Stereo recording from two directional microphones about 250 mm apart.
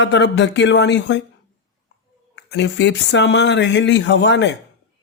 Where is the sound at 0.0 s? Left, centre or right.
Left.